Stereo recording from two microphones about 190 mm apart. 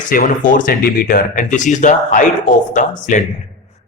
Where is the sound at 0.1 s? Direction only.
45° left (ahead or behind).